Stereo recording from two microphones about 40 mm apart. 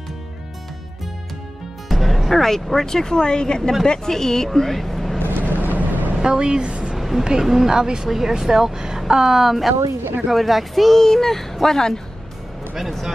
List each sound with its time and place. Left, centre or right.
1.9 s speech: centre
4.6 s vehicle: centre
5.6 s boat: right
6.2 s a woman's voice: centre
7.0 s a sound: centre
7.4 s a woman's voice: centre
12.7 s speech: centre